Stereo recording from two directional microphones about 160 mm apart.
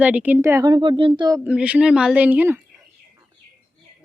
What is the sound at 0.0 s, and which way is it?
Speech, 10° right (ahead or behind).